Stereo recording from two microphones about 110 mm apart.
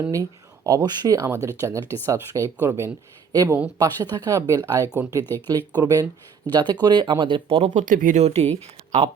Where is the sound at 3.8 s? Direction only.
35° right (ahead or behind).